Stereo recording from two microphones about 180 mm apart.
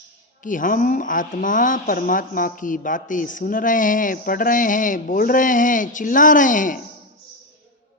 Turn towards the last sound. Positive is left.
turn(degrees=45)  # may be behind; listen again after turning